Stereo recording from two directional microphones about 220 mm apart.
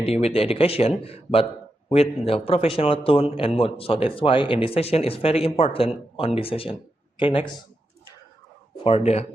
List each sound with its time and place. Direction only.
0.0 s a man's voice: 30° left (ahead or behind)
8.8 s a man's voice: 25° left (ahead or behind)